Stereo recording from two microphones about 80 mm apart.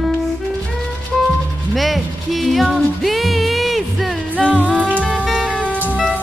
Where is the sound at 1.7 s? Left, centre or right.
Centre.